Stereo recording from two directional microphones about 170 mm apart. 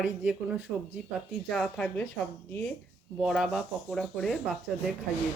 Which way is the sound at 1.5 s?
5° left (ahead or behind).